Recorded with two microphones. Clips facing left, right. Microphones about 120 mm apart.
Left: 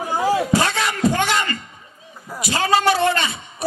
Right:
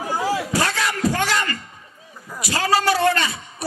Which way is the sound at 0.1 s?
20° left (ahead or behind).